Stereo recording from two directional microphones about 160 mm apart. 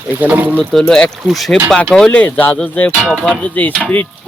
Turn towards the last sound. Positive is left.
turn(degrees=10)  # may be behind; listen again after turning